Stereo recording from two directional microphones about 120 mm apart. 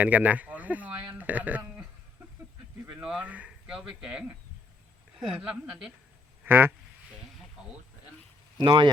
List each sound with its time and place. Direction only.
0.0 s speech: 10° right (ahead or behind)
2.9 s speech: 5° right (ahead or behind)
6.4 s speech: 15° right (ahead or behind)
8.6 s speech: 40° right (ahead or behind)